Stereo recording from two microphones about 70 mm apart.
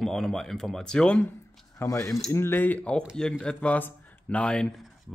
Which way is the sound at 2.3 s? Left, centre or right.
Left.